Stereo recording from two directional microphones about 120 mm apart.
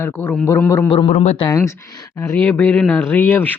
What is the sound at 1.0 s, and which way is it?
Speech, 80° left.